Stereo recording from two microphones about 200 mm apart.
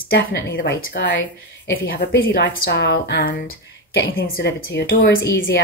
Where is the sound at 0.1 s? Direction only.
50° left (ahead or behind).